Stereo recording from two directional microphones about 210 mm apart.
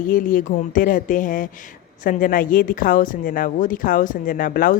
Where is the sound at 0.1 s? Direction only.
40° left (ahead or behind).